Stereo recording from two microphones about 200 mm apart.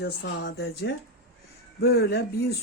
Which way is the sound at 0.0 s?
60° left (ahead or behind).